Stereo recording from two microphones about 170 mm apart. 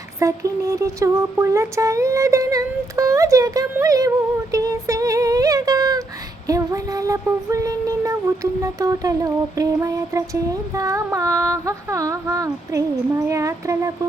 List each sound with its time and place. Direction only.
0.2 s speech: 15° right (ahead or behind)
4.5 s music: 20° right (ahead or behind)